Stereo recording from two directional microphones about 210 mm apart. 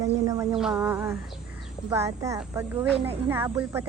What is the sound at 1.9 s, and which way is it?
Speech, 15° right (ahead or behind).